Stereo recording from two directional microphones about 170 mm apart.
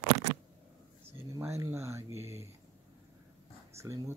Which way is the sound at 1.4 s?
15° right (ahead or behind).